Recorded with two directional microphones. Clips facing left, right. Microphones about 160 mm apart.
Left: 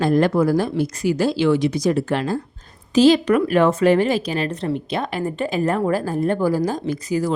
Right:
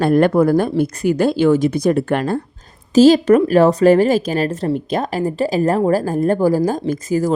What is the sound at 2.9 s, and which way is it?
Speech, 45° right (ahead or behind).